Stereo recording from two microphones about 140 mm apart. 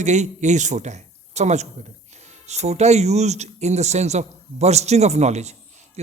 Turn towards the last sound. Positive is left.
turn(degrees=-55)  # may be behind; listen again after turning